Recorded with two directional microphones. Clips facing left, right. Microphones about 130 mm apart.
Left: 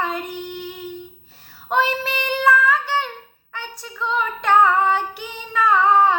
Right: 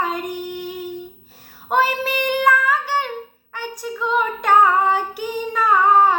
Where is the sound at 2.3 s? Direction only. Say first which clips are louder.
Left 1 dB; 15° right (ahead or behind).